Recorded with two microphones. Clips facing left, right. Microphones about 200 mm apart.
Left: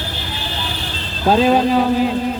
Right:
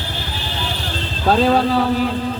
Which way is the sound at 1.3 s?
15° left (ahead or behind).